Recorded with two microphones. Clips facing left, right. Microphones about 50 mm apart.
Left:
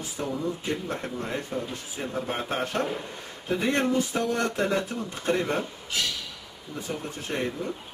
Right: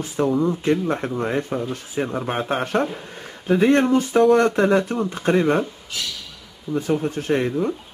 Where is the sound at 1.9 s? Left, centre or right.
Right.